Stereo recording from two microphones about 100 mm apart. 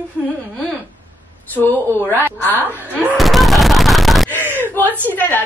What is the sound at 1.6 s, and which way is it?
Speech, 20° left (ahead or behind).